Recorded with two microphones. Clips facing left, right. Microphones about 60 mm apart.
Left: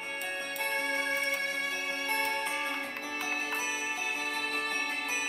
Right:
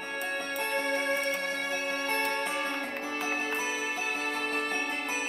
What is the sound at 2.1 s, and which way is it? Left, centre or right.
Music, right.